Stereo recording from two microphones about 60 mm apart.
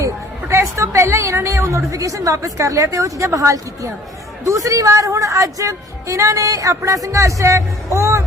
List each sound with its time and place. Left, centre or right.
0.8 s a woman's voice: right